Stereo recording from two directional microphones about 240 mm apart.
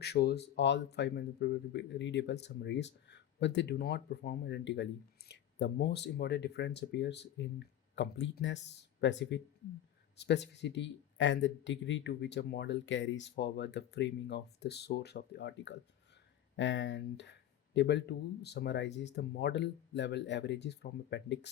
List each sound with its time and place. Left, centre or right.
0.0 s speech: left